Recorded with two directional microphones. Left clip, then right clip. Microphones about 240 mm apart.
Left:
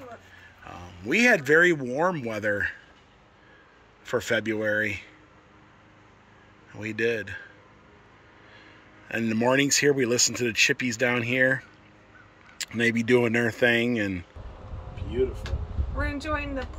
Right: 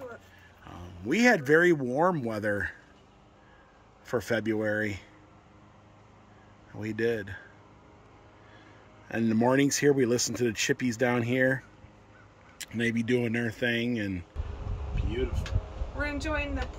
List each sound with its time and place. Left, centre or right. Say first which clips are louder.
0.7 s speech: left 3 dB; centre
4.0 s speech: left 3 dB; centre
6.7 s speech: left 3 dB; centre
9.0 s speech: left 2 dB; centre
16.0 s speech: left 2 dB; centre